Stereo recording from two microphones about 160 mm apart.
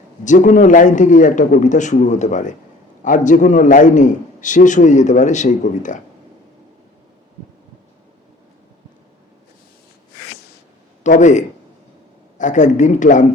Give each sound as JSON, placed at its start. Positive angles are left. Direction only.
{"t": 0.3, "sound": "a man's voice", "side_deg": 50}
{"t": 11.0, "sound": "a man's voice", "side_deg": 50}